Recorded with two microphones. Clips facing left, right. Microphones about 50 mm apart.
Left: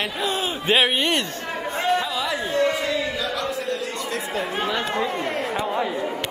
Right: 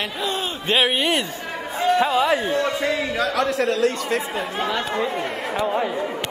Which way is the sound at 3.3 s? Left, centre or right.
Right.